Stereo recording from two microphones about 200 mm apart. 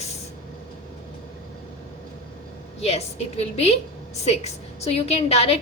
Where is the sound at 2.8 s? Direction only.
30° left (ahead or behind).